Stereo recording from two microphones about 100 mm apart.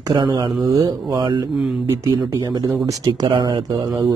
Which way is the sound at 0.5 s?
35° right (ahead or behind).